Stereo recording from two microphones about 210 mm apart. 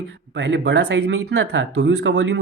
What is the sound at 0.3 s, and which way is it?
Speech, 60° right (ahead or behind).